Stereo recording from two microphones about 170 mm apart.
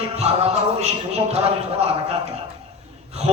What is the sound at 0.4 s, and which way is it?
Speech, 40° right (ahead or behind).